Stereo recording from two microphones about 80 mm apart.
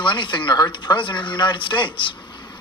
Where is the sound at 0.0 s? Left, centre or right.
Left.